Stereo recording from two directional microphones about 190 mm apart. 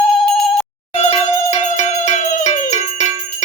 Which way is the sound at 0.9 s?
35° left (ahead or behind).